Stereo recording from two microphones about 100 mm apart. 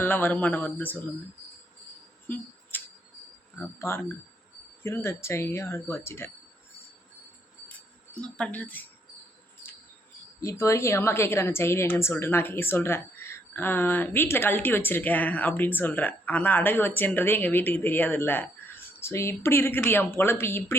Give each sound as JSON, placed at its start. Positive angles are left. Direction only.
{"t": 0.0, "sound": "speech", "side_deg": 20}
{"t": 2.2, "sound": "a sound", "side_deg": 20}
{"t": 3.8, "sound": "a woman's voice", "side_deg": 25}
{"t": 8.1, "sound": "speech", "side_deg": 10}
{"t": 10.4, "sound": "a woman's voice", "side_deg": 30}